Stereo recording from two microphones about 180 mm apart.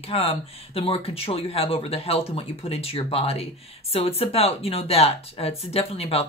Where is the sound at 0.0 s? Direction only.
35° left (ahead or behind).